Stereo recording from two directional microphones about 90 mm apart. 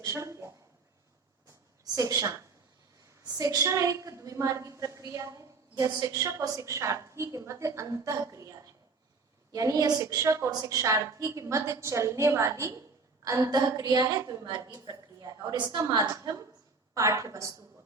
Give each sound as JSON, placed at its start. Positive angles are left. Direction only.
{"t": 0.0, "sound": "a woman's voice", "side_deg": -35}
{"t": 1.8, "sound": "a woman's voice", "side_deg": -40}
{"t": 3.3, "sound": "a woman's voice", "side_deg": -40}